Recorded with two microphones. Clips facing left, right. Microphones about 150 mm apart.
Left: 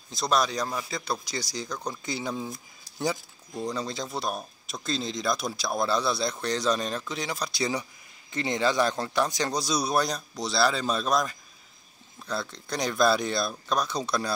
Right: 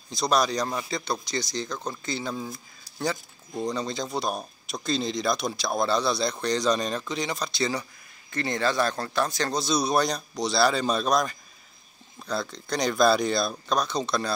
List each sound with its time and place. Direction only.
0.1 s speech: centre (ahead or behind)
3.7 s speech: 5° left (ahead or behind)